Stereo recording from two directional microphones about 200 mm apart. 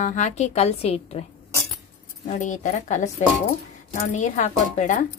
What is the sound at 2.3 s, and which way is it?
Speech, 40° left (ahead or behind).